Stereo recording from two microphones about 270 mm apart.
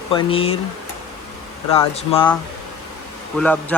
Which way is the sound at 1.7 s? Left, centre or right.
Left.